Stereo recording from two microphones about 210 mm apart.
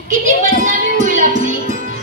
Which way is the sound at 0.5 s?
40° right (ahead or behind).